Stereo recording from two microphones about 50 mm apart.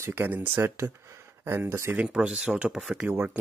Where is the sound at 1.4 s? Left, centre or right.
Right.